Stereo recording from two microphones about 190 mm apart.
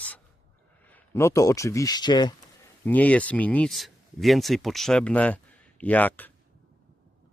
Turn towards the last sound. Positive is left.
turn(degrees=10)  # may be behind; listen again after turning